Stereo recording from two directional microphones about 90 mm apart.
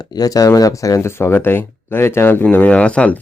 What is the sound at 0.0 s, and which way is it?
Speech, 45° left (ahead or behind).